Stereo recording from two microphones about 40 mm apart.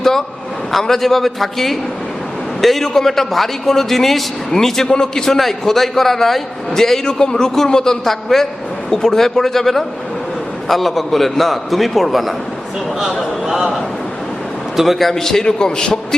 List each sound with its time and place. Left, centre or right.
0.7 s a man's voice: centre
14.8 s a man's voice: centre